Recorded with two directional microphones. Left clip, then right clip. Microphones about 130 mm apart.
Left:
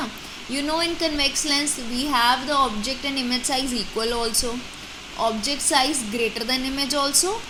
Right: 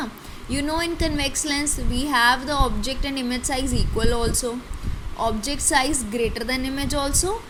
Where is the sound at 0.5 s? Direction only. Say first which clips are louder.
Left 1 dB; 25° right (ahead or behind).